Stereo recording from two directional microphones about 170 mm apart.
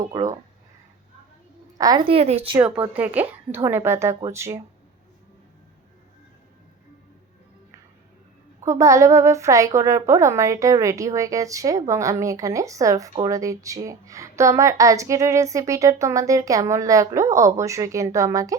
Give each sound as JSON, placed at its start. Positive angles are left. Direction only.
{"t": 0.0, "sound": "a woman's voice", "side_deg": -20}
{"t": 1.8, "sound": "a woman's voice", "side_deg": -20}
{"t": 2.0, "sound": "speech", "side_deg": -35}
{"t": 2.6, "sound": "speech", "side_deg": -5}
{"t": 8.6, "sound": "a woman's voice", "side_deg": -20}